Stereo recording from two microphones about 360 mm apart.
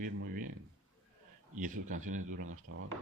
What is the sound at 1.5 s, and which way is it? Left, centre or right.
Speech, right.